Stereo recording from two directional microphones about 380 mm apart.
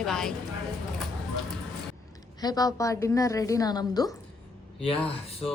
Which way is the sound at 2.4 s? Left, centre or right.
Centre.